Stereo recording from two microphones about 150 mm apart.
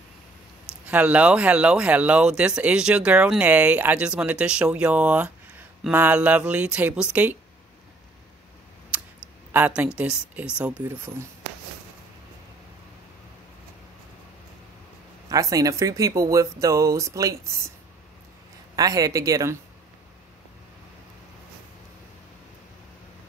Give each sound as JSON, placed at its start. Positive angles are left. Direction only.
{"t": 0.8, "sound": "speech", "side_deg": -10}
{"t": 8.9, "sound": "a sound", "side_deg": -10}
{"t": 9.5, "sound": "speech", "side_deg": -10}
{"t": 15.2, "sound": "speech", "side_deg": -25}
{"t": 18.8, "sound": "speech", "side_deg": -25}